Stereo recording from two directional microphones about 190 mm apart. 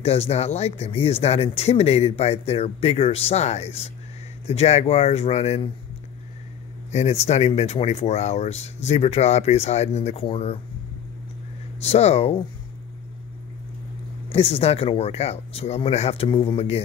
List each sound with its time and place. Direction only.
0.0 s speech: 35° left (ahead or behind)
6.9 s speech: 35° left (ahead or behind)
11.8 s speech: 35° left (ahead or behind)
14.3 s speech: 30° left (ahead or behind)